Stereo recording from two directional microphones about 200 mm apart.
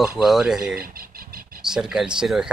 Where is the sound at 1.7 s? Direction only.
5° right (ahead or behind).